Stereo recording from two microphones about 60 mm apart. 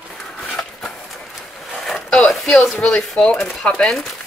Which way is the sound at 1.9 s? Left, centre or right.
Centre.